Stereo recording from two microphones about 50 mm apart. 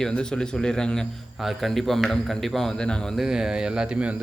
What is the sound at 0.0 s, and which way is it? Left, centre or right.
Speech, centre.